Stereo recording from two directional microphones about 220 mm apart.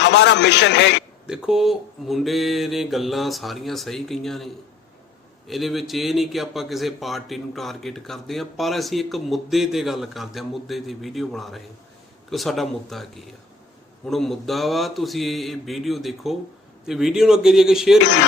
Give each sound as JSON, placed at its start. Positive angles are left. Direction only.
{"t": 0.0, "sound": "a man's voice", "side_deg": 55}
{"t": 1.3, "sound": "speech", "side_deg": -5}
{"t": 5.5, "sound": "speech", "side_deg": 0}